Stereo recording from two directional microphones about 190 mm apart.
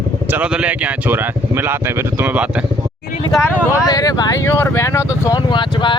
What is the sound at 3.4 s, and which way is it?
Speech, 15° left (ahead or behind).